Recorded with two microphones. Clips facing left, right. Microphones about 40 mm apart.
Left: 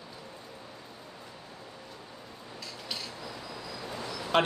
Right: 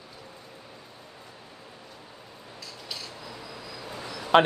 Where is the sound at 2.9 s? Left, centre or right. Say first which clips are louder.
Even; centre.